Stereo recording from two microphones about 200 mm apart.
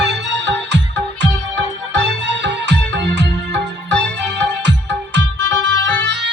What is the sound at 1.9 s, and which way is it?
Music, 60° right (ahead or behind).